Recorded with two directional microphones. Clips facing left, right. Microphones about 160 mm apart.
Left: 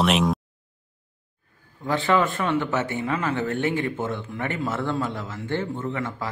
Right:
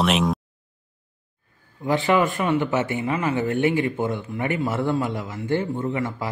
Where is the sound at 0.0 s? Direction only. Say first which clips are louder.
Even; centre (ahead or behind).